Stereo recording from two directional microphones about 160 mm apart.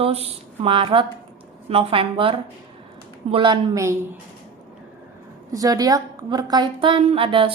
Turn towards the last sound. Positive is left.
turn(degrees=-35)  # may be behind; listen again after turning